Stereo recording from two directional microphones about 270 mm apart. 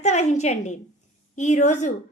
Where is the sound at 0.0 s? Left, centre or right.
Left.